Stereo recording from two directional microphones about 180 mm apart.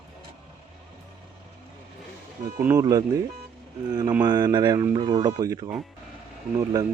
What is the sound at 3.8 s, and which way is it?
Speech, 20° right (ahead or behind).